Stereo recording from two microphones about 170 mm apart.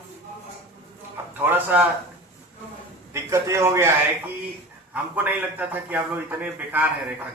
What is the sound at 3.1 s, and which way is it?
Speech, 15° right (ahead or behind).